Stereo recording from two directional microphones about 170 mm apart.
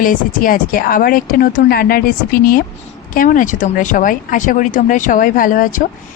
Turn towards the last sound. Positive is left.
turn(degrees=50)  # may be behind; listen again after turning